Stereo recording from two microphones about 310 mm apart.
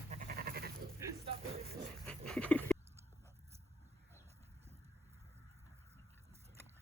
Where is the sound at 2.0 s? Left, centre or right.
Centre.